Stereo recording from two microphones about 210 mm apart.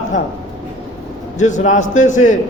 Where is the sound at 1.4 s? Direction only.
35° left (ahead or behind).